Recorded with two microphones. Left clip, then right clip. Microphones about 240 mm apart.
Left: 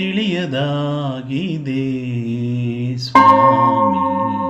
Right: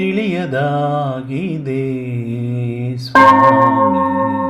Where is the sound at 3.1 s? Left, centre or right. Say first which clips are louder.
Right 2 dB; right.